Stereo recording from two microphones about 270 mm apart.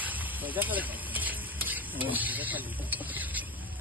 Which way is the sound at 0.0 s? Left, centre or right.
Centre.